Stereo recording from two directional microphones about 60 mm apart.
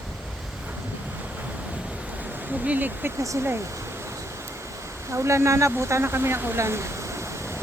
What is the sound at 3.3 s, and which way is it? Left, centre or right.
Speech, right.